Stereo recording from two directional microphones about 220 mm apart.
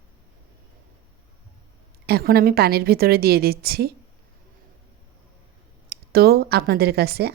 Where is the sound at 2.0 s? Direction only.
45° right (ahead or behind).